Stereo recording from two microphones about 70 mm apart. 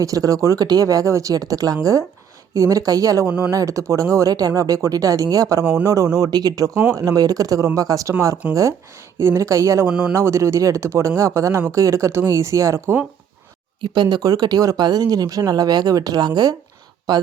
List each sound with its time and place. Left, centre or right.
0.0 s speech: right
3.2 s speech: centre
3.5 s speech: right
8.4 s speech: centre
9.1 s speech: right
9.8 s speech: right
10.2 s speech: right
13.9 s speech: right